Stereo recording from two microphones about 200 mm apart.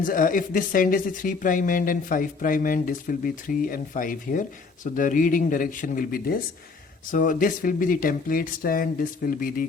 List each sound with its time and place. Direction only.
0.0 s speech: 45° left (ahead or behind)